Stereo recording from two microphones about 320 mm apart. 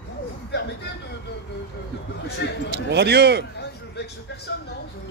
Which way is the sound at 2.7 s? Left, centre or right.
Right.